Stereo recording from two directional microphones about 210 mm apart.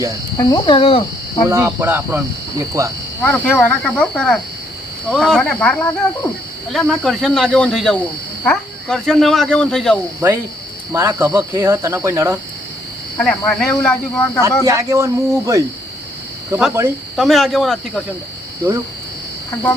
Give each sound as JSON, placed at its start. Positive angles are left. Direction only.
{"t": 0.3, "sound": "speech", "side_deg": 20}
{"t": 1.5, "sound": "speech", "side_deg": -10}
{"t": 3.2, "sound": "speech", "side_deg": 10}
{"t": 10.2, "sound": "speech", "side_deg": -10}
{"t": 13.1, "sound": "speech", "side_deg": 5}
{"t": 13.8, "sound": "speech", "side_deg": 10}
{"t": 14.7, "sound": "speech", "side_deg": -15}
{"t": 17.2, "sound": "speech", "side_deg": 0}